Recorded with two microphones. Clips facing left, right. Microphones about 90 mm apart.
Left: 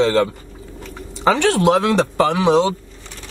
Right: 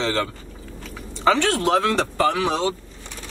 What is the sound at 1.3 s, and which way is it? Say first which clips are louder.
Speech: left 4 dB; 20° left (ahead or behind).